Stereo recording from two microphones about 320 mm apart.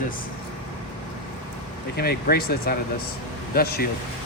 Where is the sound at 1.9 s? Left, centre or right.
Left.